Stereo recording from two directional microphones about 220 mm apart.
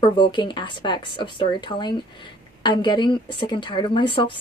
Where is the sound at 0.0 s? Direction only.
20° left (ahead or behind).